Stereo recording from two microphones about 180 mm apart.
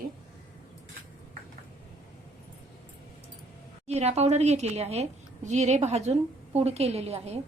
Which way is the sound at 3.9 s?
35° right (ahead or behind).